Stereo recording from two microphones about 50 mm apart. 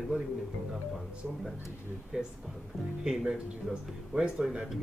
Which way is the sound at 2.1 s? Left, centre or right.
Centre.